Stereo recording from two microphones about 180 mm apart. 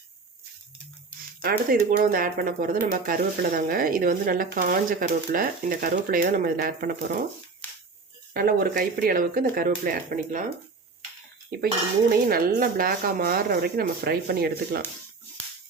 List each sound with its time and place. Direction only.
1.4 s speech: 60° right (ahead or behind)
7.6 s a sound: 10° left (ahead or behind)
8.3 s speech: 55° right (ahead or behind)
12.3 s speech: 55° right (ahead or behind)